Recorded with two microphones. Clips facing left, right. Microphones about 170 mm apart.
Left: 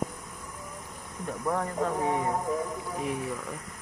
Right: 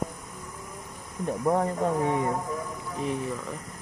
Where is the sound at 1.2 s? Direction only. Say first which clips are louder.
Right 5 dB; 25° right (ahead or behind).